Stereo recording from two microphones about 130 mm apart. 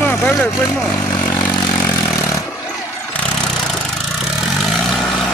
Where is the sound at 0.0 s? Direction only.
15° left (ahead or behind).